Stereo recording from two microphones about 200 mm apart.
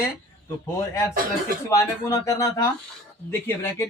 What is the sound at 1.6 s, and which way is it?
Speech, 15° left (ahead or behind).